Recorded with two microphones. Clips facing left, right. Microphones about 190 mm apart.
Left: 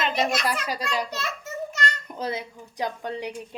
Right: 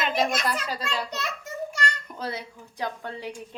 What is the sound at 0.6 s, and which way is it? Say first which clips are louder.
Speech: left 3 dB; 15° left (ahead or behind).